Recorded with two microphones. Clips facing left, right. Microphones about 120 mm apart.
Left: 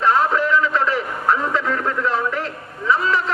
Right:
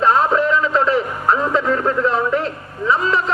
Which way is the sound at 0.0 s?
25° right (ahead or behind).